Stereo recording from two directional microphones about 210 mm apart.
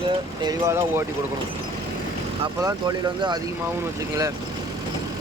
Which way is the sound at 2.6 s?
20° right (ahead or behind).